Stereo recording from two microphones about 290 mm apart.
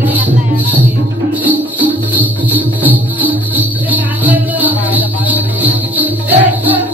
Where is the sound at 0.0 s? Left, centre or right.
Centre.